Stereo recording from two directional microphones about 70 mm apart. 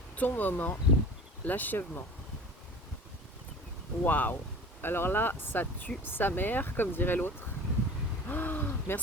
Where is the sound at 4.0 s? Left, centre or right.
Left.